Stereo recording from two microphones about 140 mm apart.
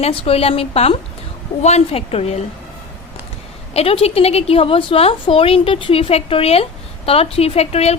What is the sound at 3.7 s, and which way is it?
A woman's voice, 45° left (ahead or behind).